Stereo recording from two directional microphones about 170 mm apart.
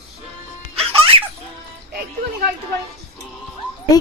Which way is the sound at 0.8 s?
35° right (ahead or behind).